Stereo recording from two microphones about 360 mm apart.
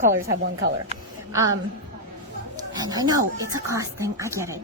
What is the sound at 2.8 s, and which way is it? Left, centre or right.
A woman's voice, centre.